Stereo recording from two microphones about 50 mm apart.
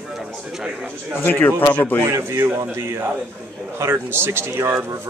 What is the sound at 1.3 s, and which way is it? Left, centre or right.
Speech, left.